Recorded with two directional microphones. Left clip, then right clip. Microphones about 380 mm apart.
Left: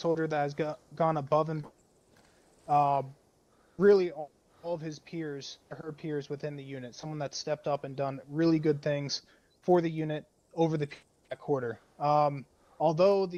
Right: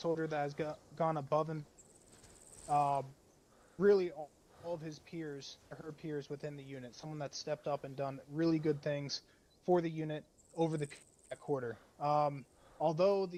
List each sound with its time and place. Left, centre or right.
0.0 s speech: centre
2.6 s speech: centre